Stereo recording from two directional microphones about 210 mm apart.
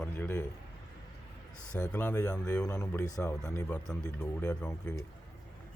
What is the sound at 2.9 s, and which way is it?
Speech, 15° left (ahead or behind).